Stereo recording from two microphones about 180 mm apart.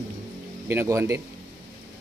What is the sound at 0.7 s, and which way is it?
Speech, 15° right (ahead or behind).